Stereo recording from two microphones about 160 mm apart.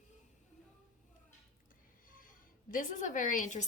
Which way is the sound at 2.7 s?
55° left (ahead or behind).